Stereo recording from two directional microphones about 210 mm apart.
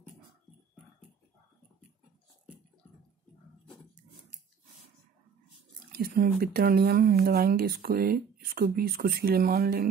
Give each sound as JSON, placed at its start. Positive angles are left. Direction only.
{"t": 5.9, "sound": "speech", "side_deg": -45}